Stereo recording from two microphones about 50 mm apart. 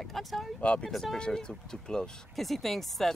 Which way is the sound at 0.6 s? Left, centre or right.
Left.